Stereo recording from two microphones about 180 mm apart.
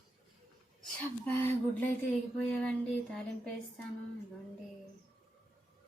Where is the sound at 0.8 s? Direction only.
10° left (ahead or behind).